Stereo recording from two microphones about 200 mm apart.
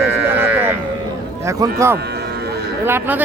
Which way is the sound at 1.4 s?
15° right (ahead or behind).